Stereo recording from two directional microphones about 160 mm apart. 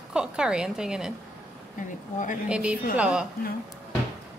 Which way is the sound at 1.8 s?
55° left (ahead or behind).